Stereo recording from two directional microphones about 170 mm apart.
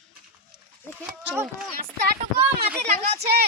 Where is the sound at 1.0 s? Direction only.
5° right (ahead or behind).